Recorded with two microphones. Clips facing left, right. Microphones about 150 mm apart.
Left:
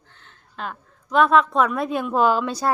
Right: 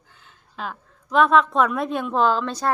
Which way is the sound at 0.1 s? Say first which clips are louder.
Even; 5° right (ahead or behind).